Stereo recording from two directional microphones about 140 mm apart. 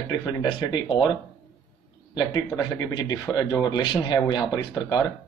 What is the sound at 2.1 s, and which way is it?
Speech, 30° left (ahead or behind).